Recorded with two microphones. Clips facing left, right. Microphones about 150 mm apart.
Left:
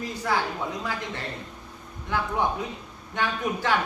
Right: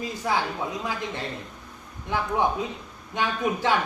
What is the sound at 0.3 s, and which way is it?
A man's voice, 15° right (ahead or behind).